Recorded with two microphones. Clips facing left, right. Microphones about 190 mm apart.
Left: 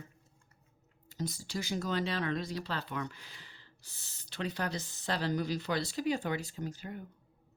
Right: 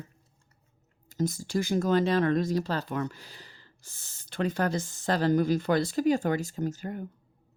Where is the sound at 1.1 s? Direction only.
45° right (ahead or behind).